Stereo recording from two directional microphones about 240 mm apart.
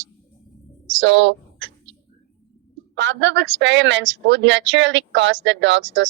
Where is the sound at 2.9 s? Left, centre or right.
Right.